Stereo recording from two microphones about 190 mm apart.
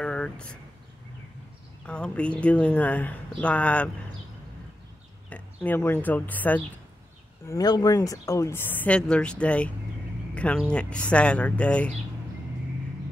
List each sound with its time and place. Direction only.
0.0 s a sound: 5° left (ahead or behind)
1.9 s speech: 5° left (ahead or behind)
5.3 s speech: 10° left (ahead or behind)
7.4 s speech: 20° left (ahead or behind)